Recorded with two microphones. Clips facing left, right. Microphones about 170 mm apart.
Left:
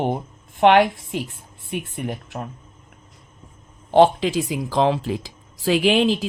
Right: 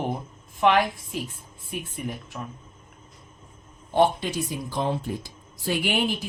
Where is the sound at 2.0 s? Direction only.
55° left (ahead or behind).